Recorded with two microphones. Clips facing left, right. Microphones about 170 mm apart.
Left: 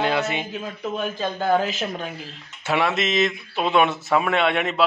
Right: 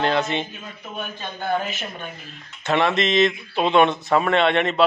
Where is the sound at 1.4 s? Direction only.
90° left.